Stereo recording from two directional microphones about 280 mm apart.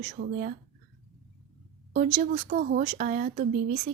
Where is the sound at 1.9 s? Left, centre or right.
Right.